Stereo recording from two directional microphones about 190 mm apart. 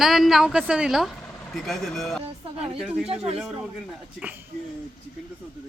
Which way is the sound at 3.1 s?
30° right (ahead or behind).